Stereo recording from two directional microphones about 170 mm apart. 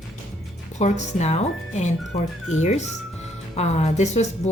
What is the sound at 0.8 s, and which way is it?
A woman's voice, 40° left (ahead or behind).